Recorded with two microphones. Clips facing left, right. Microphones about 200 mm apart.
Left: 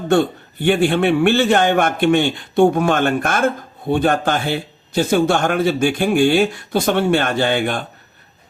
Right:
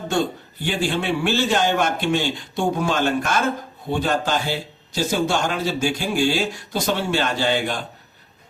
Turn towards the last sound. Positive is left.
turn(degrees=55)  # may be behind; listen again after turning